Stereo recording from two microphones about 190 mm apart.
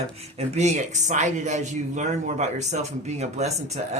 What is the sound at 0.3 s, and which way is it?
Speech, 35° right (ahead or behind).